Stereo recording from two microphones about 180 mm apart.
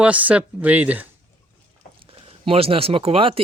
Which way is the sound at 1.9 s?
30° right (ahead or behind).